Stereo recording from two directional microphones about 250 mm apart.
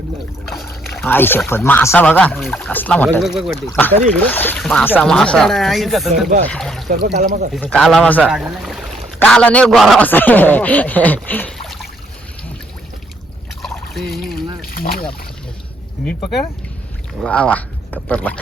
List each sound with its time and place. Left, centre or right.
0.4 s speech: centre
7.2 s speech: right
7.5 s speech: centre
13.6 s trickle: centre
14.7 s boat: left
17.2 s speech: centre